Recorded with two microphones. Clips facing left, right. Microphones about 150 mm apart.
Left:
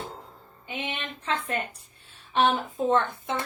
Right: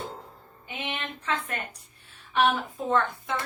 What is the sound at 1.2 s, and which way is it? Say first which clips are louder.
Speech: left 3 dB; 25° left (ahead or behind).